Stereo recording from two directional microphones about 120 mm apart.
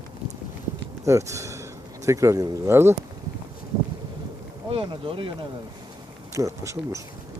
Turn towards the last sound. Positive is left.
turn(degrees=-25)  # may be behind; listen again after turning